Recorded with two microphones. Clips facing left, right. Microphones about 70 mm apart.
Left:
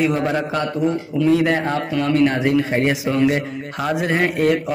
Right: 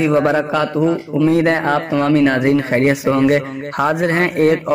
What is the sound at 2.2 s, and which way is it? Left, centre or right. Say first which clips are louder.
Speech: right 3 dB; right.